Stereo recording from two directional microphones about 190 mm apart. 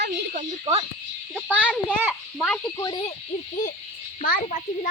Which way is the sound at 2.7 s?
20° left (ahead or behind).